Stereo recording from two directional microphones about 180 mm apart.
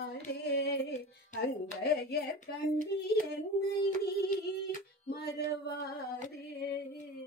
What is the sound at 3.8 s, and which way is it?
Female singing, 60° left (ahead or behind).